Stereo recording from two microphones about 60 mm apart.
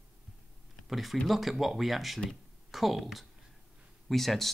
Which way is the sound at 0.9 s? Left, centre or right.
Centre.